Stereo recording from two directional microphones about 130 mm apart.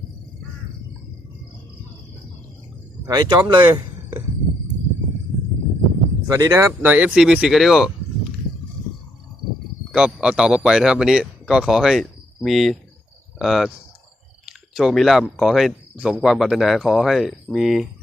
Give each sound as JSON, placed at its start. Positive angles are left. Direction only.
{"t": 3.1, "sound": "speech", "side_deg": -30}
{"t": 6.3, "sound": "speech", "side_deg": -20}
{"t": 6.9, "sound": "speech", "side_deg": -5}
{"t": 9.9, "sound": "speech", "side_deg": -5}